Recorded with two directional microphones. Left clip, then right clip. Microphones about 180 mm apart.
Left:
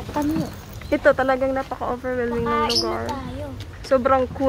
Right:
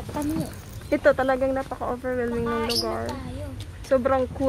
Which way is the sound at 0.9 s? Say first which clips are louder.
Left 3 dB; 5° right (ahead or behind).